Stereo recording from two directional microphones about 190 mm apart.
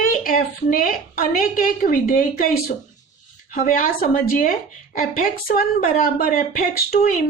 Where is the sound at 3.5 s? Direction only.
45° left (ahead or behind).